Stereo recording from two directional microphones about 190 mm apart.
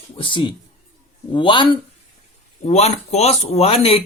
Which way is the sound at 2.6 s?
35° left (ahead or behind).